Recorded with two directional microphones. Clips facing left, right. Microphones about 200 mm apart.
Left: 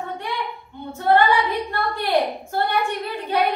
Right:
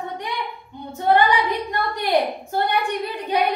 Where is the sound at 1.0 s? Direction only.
15° right (ahead or behind).